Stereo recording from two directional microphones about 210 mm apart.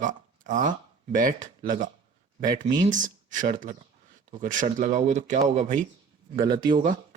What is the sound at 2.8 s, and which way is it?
Speech, 35° right (ahead or behind).